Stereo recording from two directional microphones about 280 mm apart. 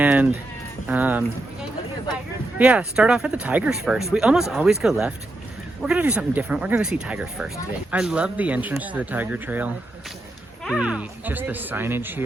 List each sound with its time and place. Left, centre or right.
0.0 s a sound: centre
0.9 s speech: centre
2.6 s speech: centre